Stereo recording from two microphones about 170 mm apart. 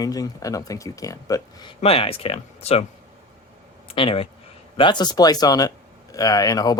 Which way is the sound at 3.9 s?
35° left (ahead or behind).